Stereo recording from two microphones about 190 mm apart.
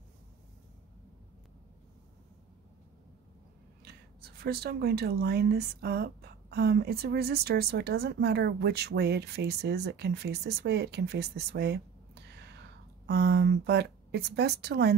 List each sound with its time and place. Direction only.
3.8 s speech: 55° right (ahead or behind)